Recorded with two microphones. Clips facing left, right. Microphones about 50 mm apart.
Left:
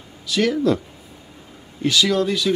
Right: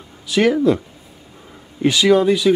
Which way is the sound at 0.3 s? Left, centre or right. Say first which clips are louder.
Right 4 dB; right.